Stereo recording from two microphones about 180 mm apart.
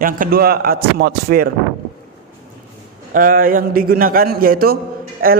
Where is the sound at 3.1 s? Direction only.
50° right (ahead or behind).